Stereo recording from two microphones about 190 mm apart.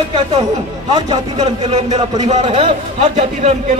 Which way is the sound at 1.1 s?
30° right (ahead or behind).